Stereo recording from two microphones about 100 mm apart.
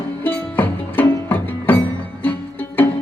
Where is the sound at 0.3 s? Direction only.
20° left (ahead or behind).